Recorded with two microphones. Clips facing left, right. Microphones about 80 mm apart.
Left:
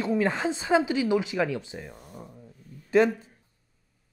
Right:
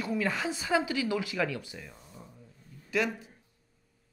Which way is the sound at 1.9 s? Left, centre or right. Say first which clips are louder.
Left 6 dB; left.